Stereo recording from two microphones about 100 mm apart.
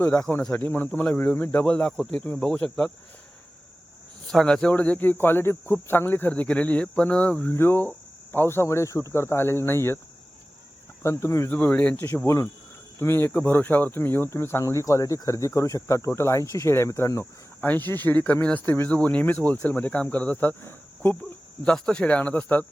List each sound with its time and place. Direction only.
0.0 s speech: 15° left (ahead or behind)
4.3 s speech: 5° left (ahead or behind); by 10.0 s 25° left (ahead or behind)
11.0 s speech: 30° left (ahead or behind)
11.5 s speech: 15° left (ahead or behind)
13.3 s speech: 15° left (ahead or behind); by 17.2 s 30° left (ahead or behind)
17.6 s speech: 20° left (ahead or behind)
21.6 s speech: 10° left (ahead or behind)